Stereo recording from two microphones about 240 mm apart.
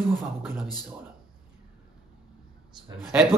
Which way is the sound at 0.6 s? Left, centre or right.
Centre.